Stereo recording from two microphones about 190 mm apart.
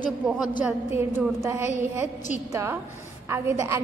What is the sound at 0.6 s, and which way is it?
A woman's voice, 15° right (ahead or behind).